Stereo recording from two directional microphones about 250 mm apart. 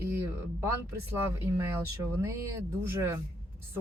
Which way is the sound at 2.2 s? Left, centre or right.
Centre.